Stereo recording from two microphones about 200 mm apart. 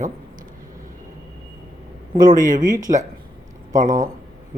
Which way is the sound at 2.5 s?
40° right (ahead or behind).